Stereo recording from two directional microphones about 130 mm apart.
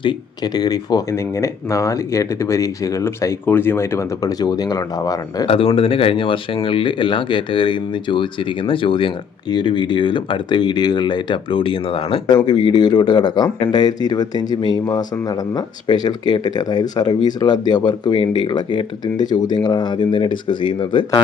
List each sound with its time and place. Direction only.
0.0 s speech: 35° left (ahead or behind)
5.5 s speech: 45° left (ahead or behind)